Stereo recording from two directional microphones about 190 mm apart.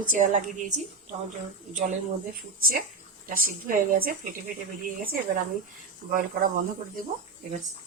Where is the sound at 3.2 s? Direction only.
45° right (ahead or behind).